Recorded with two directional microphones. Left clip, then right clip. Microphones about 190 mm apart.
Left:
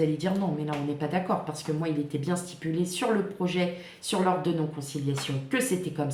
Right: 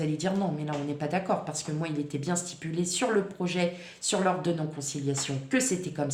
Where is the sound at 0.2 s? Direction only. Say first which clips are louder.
Even; 40° right (ahead or behind).